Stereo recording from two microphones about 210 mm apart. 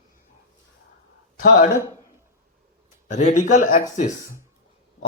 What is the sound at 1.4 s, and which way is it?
Speech, 45° left (ahead or behind).